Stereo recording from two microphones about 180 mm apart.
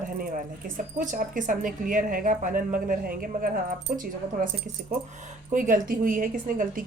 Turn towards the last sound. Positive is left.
turn(degrees=-50)  # may be behind; listen again after turning